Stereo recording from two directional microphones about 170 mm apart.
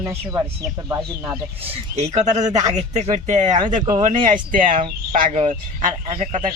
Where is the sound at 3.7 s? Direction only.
30° right (ahead or behind).